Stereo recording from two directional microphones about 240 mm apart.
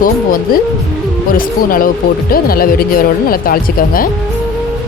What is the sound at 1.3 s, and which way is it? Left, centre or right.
Speech, left.